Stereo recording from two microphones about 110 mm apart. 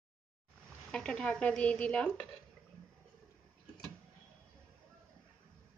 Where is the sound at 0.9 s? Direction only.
5° left (ahead or behind).